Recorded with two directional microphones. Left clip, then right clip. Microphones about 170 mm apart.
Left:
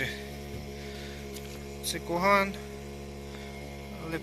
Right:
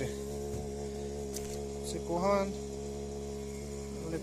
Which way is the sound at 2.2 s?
Centre (ahead or behind).